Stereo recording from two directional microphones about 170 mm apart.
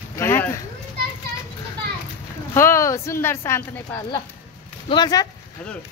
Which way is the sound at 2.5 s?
15° left (ahead or behind).